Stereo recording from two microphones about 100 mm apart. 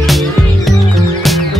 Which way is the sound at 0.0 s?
Centre (ahead or behind).